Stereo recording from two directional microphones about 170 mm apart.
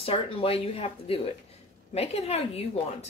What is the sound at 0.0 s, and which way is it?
Speech, 35° left (ahead or behind).